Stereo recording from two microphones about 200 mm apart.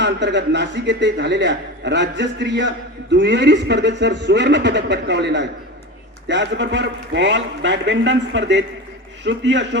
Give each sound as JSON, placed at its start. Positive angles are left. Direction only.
{"t": 0.0, "sound": "a man's voice", "side_deg": -60}